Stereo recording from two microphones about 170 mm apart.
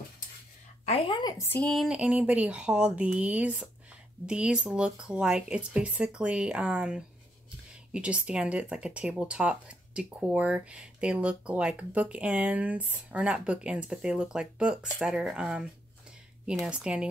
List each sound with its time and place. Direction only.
0.8 s a woman's voice: 30° left (ahead or behind)
1.4 s speech: 10° left (ahead or behind)
1.7 s speech: centre (ahead or behind)